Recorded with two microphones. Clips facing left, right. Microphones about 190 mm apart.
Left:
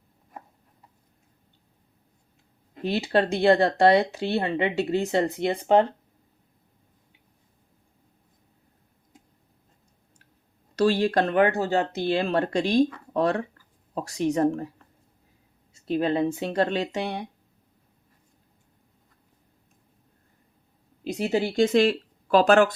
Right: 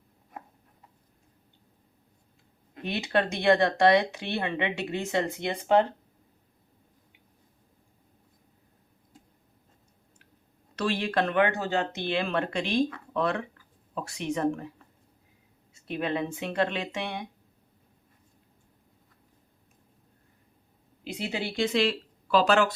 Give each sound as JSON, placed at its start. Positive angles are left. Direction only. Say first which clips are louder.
{"t": 2.8, "sound": "speech", "louder": "left 4 dB", "side_deg": 35}
{"t": 10.8, "sound": "speech", "louder": "left 6 dB", "side_deg": 35}
{"t": 15.7, "sound": "speech", "louder": "left 6 dB", "side_deg": 35}
{"t": 21.0, "sound": "speech", "louder": "left 8 dB", "side_deg": 40}